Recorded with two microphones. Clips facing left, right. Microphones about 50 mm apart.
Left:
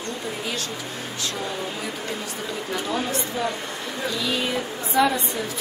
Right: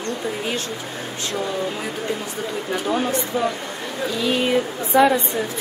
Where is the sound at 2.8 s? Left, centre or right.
Right.